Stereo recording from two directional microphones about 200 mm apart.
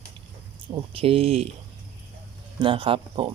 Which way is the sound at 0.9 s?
30° right (ahead or behind).